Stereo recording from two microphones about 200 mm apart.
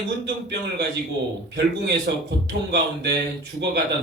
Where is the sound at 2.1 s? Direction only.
55° right (ahead or behind).